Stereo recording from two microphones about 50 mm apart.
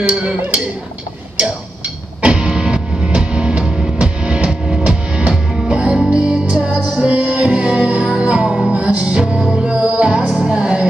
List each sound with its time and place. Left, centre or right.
0.1 s speech: right
2.2 s music: right